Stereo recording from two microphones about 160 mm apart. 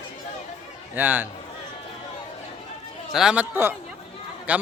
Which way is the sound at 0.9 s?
10° right (ahead or behind).